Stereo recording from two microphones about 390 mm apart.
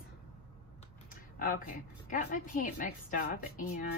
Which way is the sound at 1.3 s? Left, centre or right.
Left.